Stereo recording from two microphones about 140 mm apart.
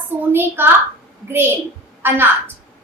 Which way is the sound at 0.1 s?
15° right (ahead or behind).